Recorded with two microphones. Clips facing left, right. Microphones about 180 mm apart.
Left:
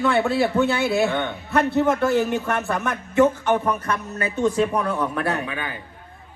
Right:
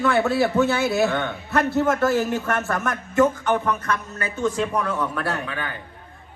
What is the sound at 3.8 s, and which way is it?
Speech, 25° left (ahead or behind).